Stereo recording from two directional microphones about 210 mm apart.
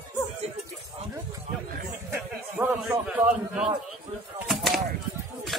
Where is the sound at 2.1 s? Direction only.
10° right (ahead or behind).